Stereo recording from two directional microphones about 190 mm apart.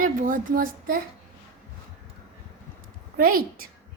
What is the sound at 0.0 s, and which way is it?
Child singing, 45° right (ahead or behind).